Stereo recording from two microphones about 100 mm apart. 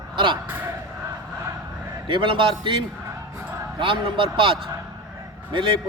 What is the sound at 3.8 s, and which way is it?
Speech, 55° right (ahead or behind).